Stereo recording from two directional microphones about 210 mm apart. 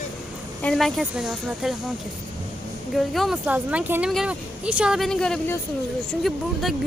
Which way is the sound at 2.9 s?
Centre (ahead or behind).